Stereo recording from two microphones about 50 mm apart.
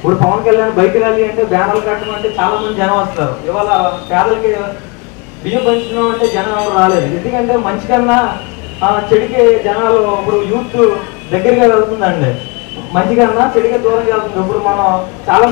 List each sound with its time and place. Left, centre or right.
0.0 s a man's voice: centre